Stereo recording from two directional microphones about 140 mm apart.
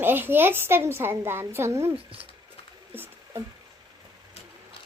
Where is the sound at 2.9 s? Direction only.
15° right (ahead or behind).